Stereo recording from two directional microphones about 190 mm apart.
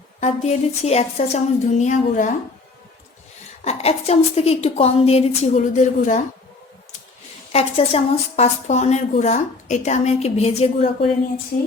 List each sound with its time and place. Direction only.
0.2 s speech: 35° left (ahead or behind)
3.6 s speech: 35° left (ahead or behind)
7.5 s speech: 30° left (ahead or behind)
11.5 s music: 40° left (ahead or behind)